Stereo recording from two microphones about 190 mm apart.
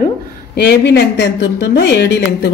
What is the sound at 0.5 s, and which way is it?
Speech, 60° left (ahead or behind).